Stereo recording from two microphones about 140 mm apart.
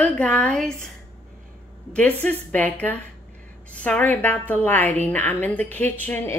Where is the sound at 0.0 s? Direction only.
10° left (ahead or behind).